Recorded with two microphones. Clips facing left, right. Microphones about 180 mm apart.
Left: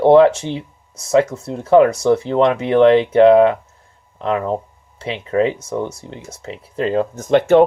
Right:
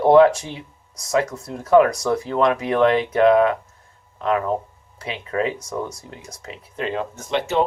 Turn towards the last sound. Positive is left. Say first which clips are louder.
# left 10 dB
turn(degrees=50)  # may be behind; listen again after turning